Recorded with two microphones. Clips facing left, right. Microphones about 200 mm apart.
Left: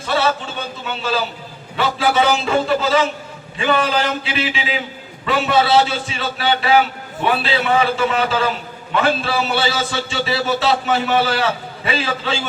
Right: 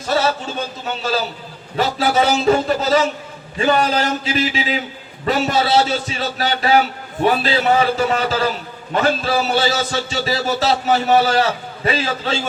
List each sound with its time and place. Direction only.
0.9 s a man's voice: 40° right (ahead or behind)